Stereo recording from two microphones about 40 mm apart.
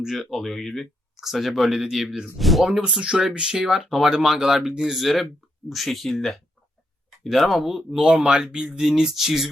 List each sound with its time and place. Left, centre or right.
0.0 s speech: centre
2.4 s speech: centre
2.6 s speech: centre
8.0 s speech: right; by 9.5 s centre